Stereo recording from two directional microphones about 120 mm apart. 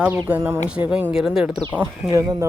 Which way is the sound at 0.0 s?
15° right (ahead or behind).